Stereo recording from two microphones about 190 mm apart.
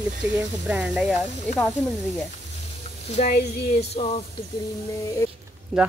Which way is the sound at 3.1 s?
35° left (ahead or behind).